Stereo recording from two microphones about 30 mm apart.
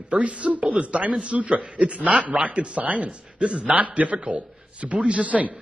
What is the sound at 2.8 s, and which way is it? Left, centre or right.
Speech, right.